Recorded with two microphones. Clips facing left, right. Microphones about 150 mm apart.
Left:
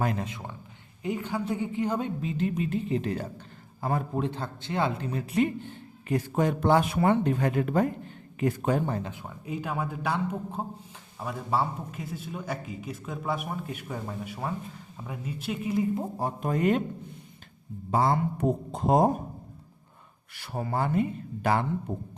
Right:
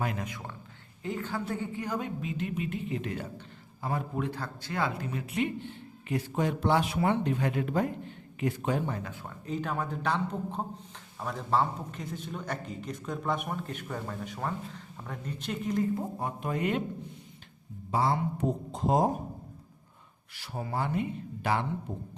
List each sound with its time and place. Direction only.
0.0 s a woman's voice: 35° left (ahead or behind)
0.3 s a woman's voice: 20° left (ahead or behind); by 4.2 s 45° left (ahead or behind)
4.2 s speech: 25° left (ahead or behind)
5.1 s a man's voice: 35° left (ahead or behind)
9.0 s speech: 20° left (ahead or behind)
9.2 s a man's voice: 10° left (ahead or behind)
16.1 s a woman's voice: 35° left (ahead or behind)
17.9 s a man's voice: 50° left (ahead or behind)
20.3 s a man's voice: 55° left (ahead or behind)